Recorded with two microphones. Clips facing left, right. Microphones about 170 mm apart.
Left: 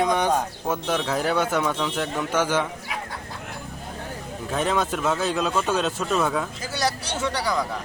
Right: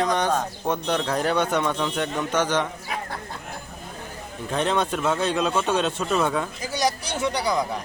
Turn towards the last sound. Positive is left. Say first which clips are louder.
# right 1 dB
turn(degrees=-15)  # may be behind; listen again after turning